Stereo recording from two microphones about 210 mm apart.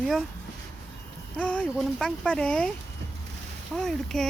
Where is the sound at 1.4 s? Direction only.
5° left (ahead or behind).